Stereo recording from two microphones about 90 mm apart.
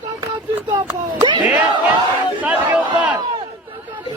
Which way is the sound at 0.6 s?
60° right (ahead or behind).